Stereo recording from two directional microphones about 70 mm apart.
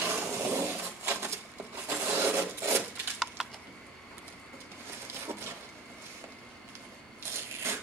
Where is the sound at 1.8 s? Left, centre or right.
Right.